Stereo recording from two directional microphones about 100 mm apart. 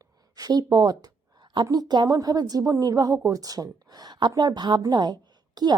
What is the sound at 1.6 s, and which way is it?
A woman's voice, 40° right (ahead or behind).